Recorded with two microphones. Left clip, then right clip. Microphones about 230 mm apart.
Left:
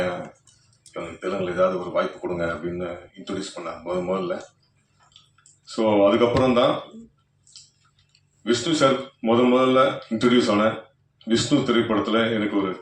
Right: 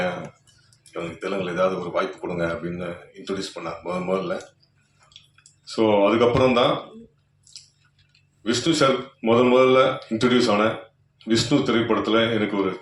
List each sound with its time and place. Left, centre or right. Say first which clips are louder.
0.9 s speech: even; right
5.0 s tick-tock: right 3 dB; right
8.4 s speech: even; right